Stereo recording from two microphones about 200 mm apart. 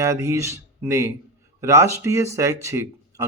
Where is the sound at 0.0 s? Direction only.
15° right (ahead or behind).